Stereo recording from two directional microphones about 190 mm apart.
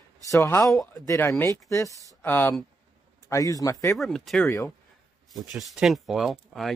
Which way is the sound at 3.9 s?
Centre (ahead or behind).